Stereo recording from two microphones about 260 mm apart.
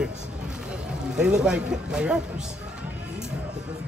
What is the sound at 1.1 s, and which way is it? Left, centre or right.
Speech, centre.